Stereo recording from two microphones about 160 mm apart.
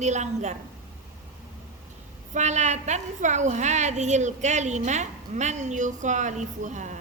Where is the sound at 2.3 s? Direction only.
45° right (ahead or behind).